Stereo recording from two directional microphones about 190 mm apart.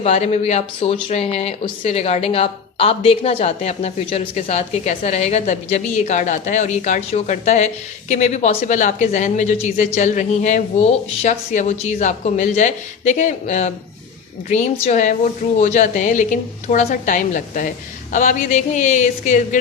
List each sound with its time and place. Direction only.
0.0 s a woman's voice: 35° left (ahead or behind)